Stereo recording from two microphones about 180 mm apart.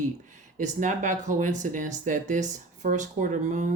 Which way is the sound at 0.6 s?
45° right (ahead or behind).